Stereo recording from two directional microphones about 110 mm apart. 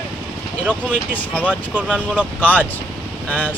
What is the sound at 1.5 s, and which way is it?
Speech, 10° right (ahead or behind).